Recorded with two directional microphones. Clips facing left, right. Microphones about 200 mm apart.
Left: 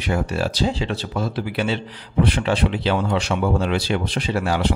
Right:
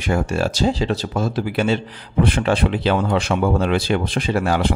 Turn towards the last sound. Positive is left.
turn(degrees=-50)  # may be behind; listen again after turning